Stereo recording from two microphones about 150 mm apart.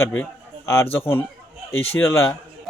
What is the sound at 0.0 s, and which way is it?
A man's voice, 15° left (ahead or behind).